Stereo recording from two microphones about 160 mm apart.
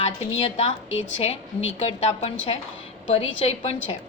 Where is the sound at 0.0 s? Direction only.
40° left (ahead or behind).